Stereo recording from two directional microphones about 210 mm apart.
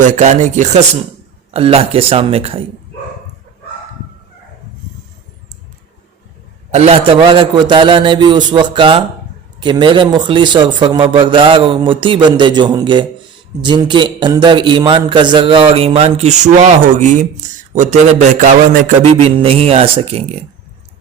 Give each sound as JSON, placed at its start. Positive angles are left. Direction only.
{"t": 0.0, "sound": "a man's voice", "side_deg": -35}
{"t": 6.7, "sound": "a man's voice", "side_deg": -30}